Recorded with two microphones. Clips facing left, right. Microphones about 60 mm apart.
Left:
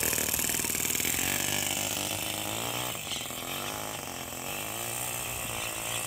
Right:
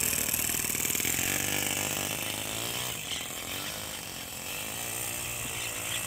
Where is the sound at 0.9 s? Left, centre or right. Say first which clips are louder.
Even; centre.